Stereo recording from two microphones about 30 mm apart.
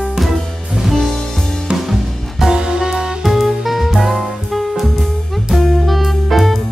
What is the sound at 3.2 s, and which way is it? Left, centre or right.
Music, centre.